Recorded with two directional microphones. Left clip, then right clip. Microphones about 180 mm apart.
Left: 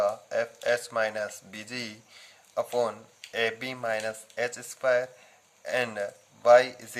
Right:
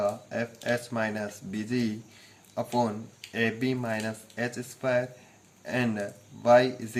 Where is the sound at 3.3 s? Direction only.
40° left (ahead or behind).